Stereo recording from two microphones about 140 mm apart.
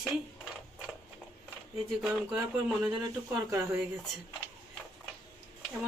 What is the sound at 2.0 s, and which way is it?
Speech, 10° right (ahead or behind).